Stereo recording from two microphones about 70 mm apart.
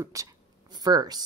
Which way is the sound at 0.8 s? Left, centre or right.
Right.